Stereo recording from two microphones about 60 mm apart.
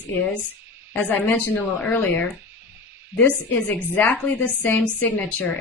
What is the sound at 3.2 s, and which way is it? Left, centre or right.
A woman's voice, left.